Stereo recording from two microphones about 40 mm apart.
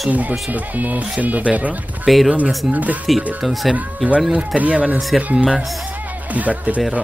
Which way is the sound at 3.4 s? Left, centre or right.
Centre.